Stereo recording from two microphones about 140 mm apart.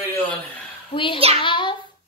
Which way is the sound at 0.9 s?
40° left (ahead or behind).